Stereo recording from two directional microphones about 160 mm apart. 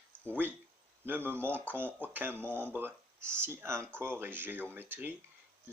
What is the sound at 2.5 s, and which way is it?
Speech, 10° left (ahead or behind).